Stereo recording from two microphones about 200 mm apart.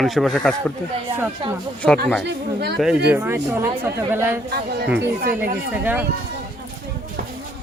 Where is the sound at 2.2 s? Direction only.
55° right (ahead or behind).